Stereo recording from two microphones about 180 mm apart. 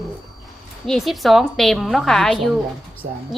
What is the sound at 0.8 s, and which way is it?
A woman's voice, centre (ahead or behind).